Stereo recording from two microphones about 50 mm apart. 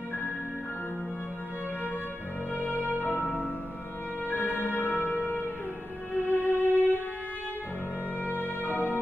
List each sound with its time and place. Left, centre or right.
2.7 s music: left
8.3 s music: left